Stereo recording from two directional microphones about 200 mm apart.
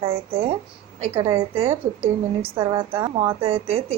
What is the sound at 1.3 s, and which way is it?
Speech, 30° right (ahead or behind).